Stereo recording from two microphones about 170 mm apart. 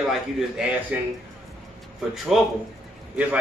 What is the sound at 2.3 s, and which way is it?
A man's voice, 5° right (ahead or behind).